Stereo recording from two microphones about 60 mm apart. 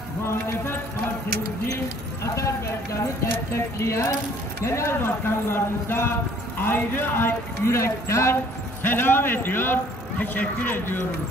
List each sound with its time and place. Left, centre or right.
0.2 s speech: left
2.3 s a man's voice: left
8.8 s a man's voice: left